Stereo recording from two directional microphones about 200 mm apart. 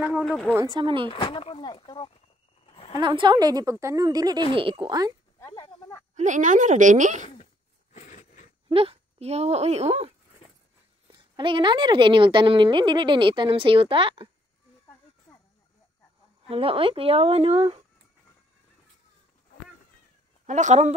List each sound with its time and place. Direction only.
0.0 s speech: centre (ahead or behind)
0.5 s a woman's voice: 15° right (ahead or behind)
1.1 s speech: 25° left (ahead or behind)
2.6 s a sound: 30° left (ahead or behind)
3.0 s a woman's voice: 25° right (ahead or behind)
5.4 s snake: 15° left (ahead or behind)
6.1 s a woman's voice: 40° right (ahead or behind)
7.9 s a sound: 40° left (ahead or behind)
8.6 s a woman's voice: 30° right (ahead or behind)
16.4 s a woman's voice: 30° right (ahead or behind)
20.4 s a woman's voice: 35° right (ahead or behind)